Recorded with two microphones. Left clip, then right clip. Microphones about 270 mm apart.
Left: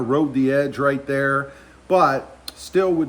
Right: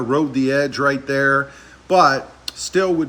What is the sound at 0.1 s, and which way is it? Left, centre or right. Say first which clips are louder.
Speech: right 1 dB; centre.